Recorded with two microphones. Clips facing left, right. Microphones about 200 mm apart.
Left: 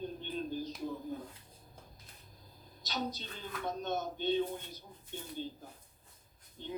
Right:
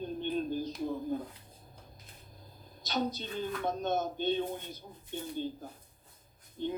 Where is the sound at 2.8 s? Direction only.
50° right (ahead or behind).